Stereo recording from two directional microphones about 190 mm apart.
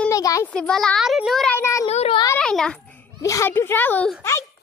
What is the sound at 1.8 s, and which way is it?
Speech, 30° left (ahead or behind).